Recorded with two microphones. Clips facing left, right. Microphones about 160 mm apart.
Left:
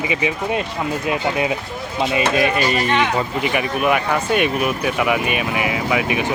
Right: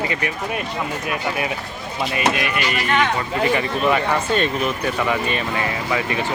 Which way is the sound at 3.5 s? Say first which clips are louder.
Left 5 dB; 10° left (ahead or behind).